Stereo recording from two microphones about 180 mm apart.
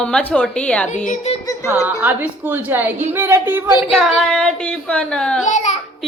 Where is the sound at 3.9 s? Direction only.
Centre (ahead or behind).